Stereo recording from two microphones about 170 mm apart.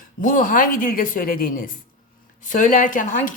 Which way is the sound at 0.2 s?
55° left (ahead or behind).